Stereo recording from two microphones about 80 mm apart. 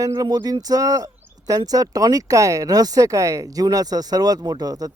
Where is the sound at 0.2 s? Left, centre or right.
Right.